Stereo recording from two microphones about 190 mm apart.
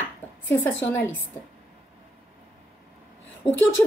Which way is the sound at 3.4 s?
30° left (ahead or behind).